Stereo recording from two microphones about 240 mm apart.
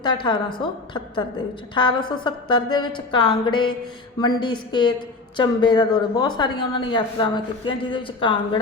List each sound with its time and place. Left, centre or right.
0.0 s a woman's voice: centre